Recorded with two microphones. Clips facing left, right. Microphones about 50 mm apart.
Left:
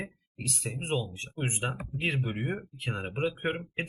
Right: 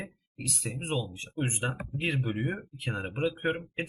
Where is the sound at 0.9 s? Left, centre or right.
Centre.